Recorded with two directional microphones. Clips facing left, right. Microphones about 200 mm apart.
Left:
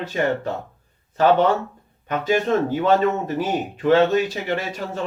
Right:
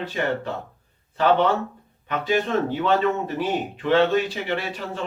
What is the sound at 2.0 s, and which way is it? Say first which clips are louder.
Speech: left 3 dB; 45° left (ahead or behind).